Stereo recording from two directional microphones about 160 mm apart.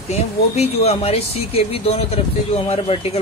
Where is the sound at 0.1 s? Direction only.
40° left (ahead or behind).